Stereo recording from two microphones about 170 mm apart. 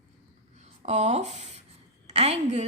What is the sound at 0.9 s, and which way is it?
A woman's voice, 40° right (ahead or behind).